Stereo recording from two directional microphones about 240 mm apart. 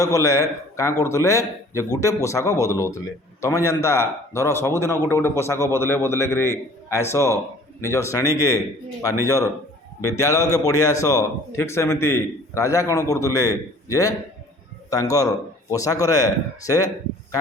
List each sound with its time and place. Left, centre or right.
0.0 s a man's voice: centre